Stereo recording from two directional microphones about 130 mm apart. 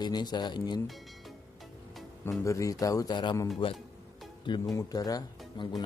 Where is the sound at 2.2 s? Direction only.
25° left (ahead or behind); by 3.8 s 40° left (ahead or behind).